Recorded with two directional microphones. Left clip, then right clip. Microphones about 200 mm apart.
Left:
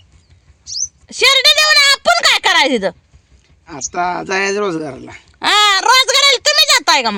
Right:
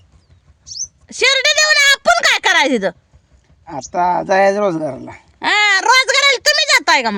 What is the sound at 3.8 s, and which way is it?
Speech, 50° right (ahead or behind).